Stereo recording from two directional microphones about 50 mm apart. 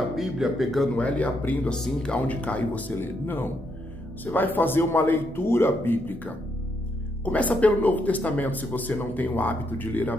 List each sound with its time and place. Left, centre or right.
0.1 s speech: centre
0.9 s speech: left
3.0 s a man's voice: left